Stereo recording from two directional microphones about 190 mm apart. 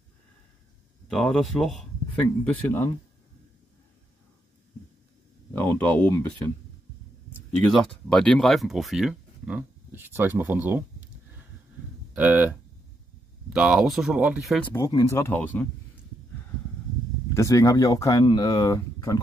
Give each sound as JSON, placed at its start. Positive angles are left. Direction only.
{"t": 1.0, "sound": "speech", "side_deg": 0}
{"t": 2.2, "sound": "speech", "side_deg": 10}
{"t": 5.5, "sound": "speech", "side_deg": 10}
{"t": 8.1, "sound": "speech", "side_deg": 5}
{"t": 12.1, "sound": "speech", "side_deg": -10}
{"t": 14.9, "sound": "speech", "side_deg": 15}
{"t": 17.3, "sound": "speech", "side_deg": 15}